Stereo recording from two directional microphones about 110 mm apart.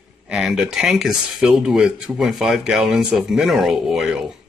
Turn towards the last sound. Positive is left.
turn(degrees=-5)  # may be behind; listen again after turning